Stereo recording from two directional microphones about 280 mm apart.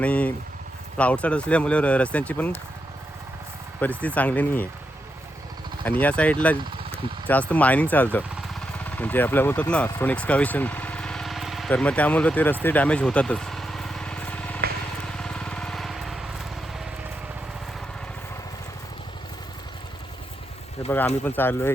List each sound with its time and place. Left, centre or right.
0.0 s speech: centre
3.8 s speech: centre
5.8 s speech: centre
12.6 s vehicle: centre
15.0 s lawn mower: centre
20.8 s a sound: left
21.2 s speech: centre